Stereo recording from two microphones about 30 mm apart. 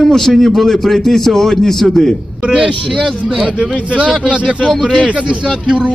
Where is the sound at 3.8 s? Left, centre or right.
Right.